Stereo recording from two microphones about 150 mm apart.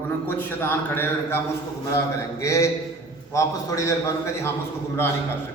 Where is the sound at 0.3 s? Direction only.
15° left (ahead or behind).